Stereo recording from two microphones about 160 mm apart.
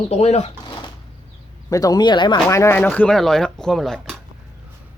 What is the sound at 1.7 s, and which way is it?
Speech, 20° left (ahead or behind).